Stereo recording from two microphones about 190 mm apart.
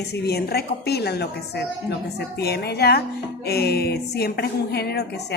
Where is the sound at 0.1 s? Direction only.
55° left (ahead or behind).